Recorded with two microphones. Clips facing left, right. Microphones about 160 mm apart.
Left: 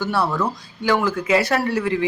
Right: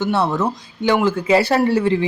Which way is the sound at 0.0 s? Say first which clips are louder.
Right 3 dB; 20° right (ahead or behind).